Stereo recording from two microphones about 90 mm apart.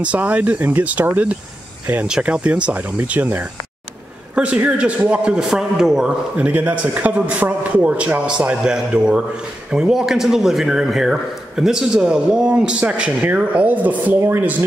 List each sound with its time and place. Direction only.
0.0 s a man's voice: 15° right (ahead or behind)